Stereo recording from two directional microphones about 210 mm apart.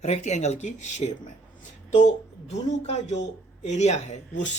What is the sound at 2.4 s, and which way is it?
Speech, 30° left (ahead or behind).